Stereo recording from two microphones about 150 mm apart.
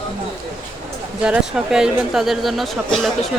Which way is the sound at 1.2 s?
5° right (ahead or behind).